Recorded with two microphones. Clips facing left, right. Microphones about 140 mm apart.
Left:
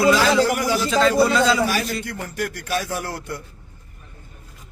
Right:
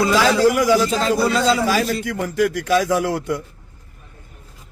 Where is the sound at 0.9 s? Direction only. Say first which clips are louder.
Left 1 dB; 40° right (ahead or behind).